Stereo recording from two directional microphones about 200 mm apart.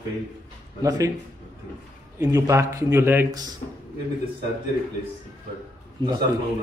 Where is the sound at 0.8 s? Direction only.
20° right (ahead or behind).